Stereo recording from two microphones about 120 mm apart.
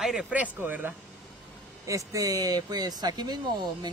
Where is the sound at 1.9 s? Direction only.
25° right (ahead or behind).